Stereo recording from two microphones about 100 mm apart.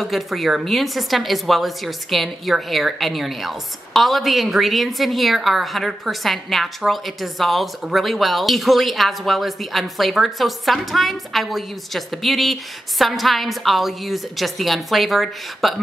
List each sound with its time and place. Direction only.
0.0 s a woman's voice: centre (ahead or behind)